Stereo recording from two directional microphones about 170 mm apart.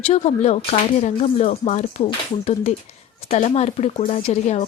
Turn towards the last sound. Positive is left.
turn(degrees=40)  # may be behind; listen again after turning